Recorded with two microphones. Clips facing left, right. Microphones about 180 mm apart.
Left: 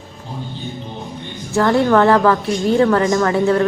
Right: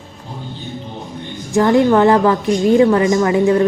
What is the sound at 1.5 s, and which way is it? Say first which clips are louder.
A woman's voice: right 2 dB; 15° right (ahead or behind).